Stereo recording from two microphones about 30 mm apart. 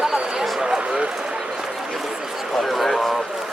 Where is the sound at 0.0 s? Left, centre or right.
Centre.